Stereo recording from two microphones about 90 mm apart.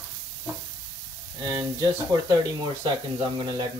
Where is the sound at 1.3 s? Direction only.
40° right (ahead or behind).